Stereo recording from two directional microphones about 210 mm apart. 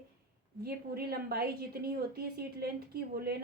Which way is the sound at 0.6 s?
45° right (ahead or behind).